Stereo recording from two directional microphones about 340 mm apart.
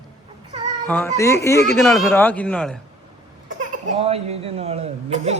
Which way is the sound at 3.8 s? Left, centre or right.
Centre.